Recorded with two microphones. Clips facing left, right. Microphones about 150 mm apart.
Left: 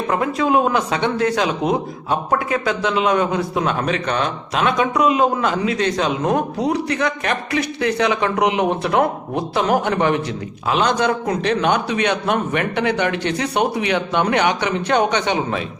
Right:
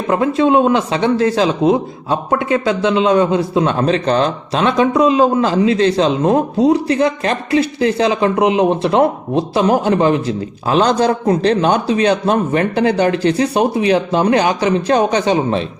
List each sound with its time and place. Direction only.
0.1 s a man's voice: 25° right (ahead or behind)